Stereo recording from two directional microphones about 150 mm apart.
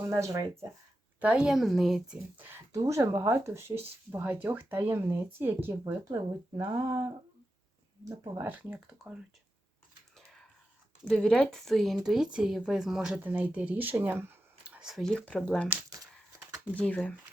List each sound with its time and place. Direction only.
0.0 s speech: 20° right (ahead or behind)
1.2 s speech: 10° right (ahead or behind)
2.4 s speech: 20° right (ahead or behind)
6.1 s speech: 25° right (ahead or behind)
8.0 s speech: 25° right (ahead or behind)
8.4 s speech: 10° right (ahead or behind)
11.0 s speech: 5° left (ahead or behind)
16.7 s speech: 10° left (ahead or behind)